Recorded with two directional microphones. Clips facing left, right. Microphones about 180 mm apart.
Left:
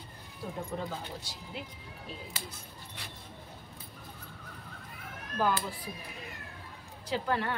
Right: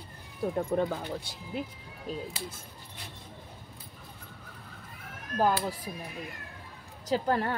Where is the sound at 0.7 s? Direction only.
55° right (ahead or behind).